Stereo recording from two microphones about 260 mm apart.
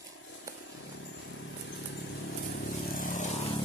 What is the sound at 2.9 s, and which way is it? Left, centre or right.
Vehicle, left.